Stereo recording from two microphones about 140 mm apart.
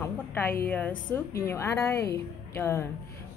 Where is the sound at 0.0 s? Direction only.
15° left (ahead or behind).